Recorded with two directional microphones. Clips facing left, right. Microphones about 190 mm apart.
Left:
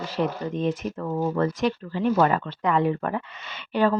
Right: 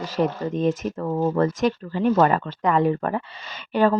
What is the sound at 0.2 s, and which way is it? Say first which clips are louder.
A woman's voice: right 3 dB; 45° right (ahead or behind).